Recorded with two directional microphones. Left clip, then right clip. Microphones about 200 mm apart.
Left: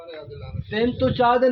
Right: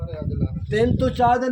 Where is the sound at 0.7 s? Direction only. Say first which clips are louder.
Right 1 dB; 55° right (ahead or behind).